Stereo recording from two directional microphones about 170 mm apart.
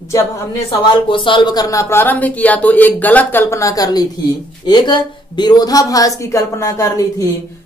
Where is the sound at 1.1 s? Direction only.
30° left (ahead or behind).